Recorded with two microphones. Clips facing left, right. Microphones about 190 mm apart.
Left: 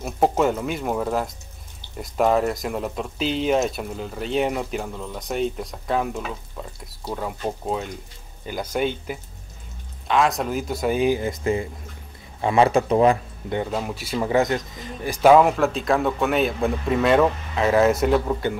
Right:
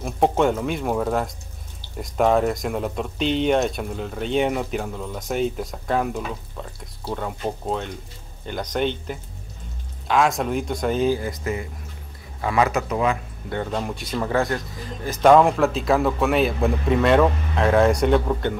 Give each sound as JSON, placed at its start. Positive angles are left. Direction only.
{"t": 0.0, "sound": "speech", "side_deg": 5}
{"t": 13.7, "sound": "speech", "side_deg": 5}
{"t": 14.3, "sound": "speech", "side_deg": 20}
{"t": 15.0, "sound": "speech", "side_deg": 5}